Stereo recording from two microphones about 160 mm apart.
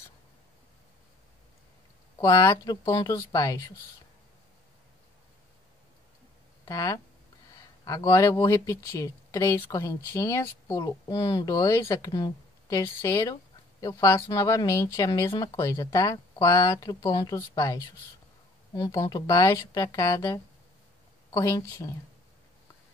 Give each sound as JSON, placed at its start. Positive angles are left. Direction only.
{"t": 2.1, "sound": "speech", "side_deg": 25}
{"t": 6.6, "sound": "speech", "side_deg": 20}